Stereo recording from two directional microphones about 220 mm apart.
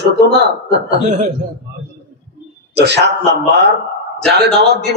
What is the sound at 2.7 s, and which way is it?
Speech, 50° right (ahead or behind).